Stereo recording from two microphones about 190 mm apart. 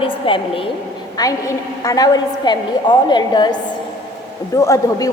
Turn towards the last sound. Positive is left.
turn(degrees=15)  # may be behind; listen again after turning